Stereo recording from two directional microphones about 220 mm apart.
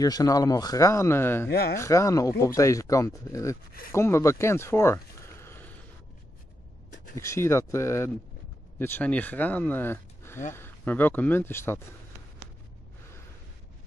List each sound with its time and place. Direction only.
0.0 s speech: 15° left (ahead or behind)
1.5 s speech: 45° left (ahead or behind)
1.8 s speech: 15° left (ahead or behind)
7.2 s speech: 10° left (ahead or behind)